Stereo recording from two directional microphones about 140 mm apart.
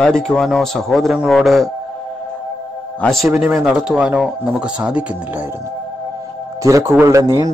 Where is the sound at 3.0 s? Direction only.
5° left (ahead or behind).